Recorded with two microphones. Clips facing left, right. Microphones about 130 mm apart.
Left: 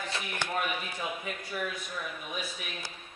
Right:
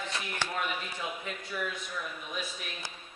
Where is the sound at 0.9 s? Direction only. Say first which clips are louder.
Left 2 dB; 10° left (ahead or behind).